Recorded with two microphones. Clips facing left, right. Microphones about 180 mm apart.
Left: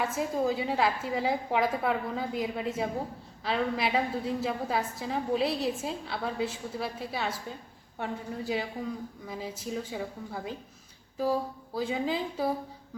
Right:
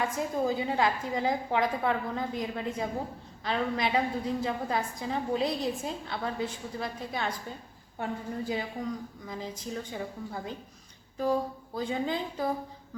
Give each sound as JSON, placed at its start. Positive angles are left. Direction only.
{"t": 0.0, "sound": "a woman's voice", "side_deg": 5}